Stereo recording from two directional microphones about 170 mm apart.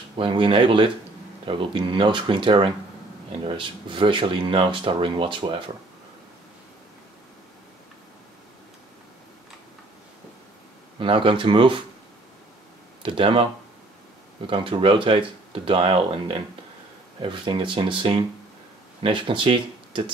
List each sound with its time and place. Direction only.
0.2 s speech: 30° right (ahead or behind)
11.0 s speech: 30° right (ahead or behind)
13.0 s speech: 30° right (ahead or behind)